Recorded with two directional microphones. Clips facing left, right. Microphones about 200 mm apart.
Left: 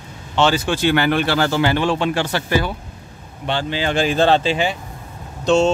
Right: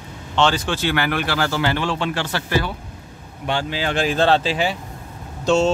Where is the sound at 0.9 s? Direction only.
25° left (ahead or behind).